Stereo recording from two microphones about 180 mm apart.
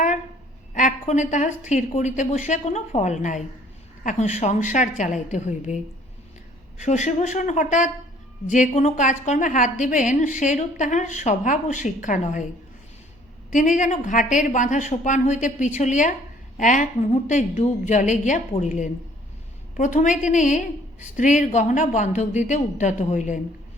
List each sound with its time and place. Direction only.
0.7 s a woman's voice: 45° left (ahead or behind)
13.5 s a woman's voice: 45° left (ahead or behind)